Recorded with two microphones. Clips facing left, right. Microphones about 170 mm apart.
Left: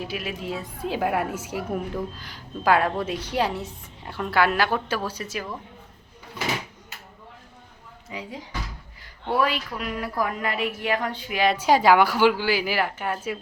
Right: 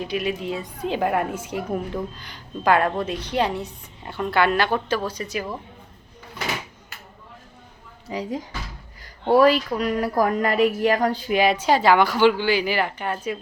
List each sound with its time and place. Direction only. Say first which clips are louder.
0.0 s a woman's voice: right 5 dB; 5° left (ahead or behind)
8.0 s a woman's voice: right 8 dB; 40° right (ahead or behind)
11.5 s a woman's voice: left 4 dB; 10° left (ahead or behind)